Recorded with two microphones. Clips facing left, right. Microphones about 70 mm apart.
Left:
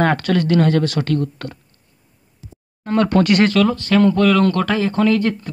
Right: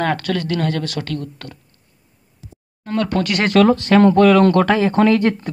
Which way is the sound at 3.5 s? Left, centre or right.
Right.